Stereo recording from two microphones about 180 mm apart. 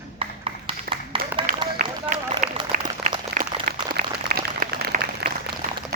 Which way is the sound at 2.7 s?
50° right (ahead or behind).